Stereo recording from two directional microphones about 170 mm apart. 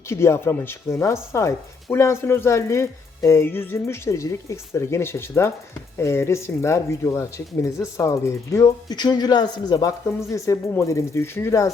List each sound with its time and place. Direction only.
0.1 s speech: 15° left (ahead or behind)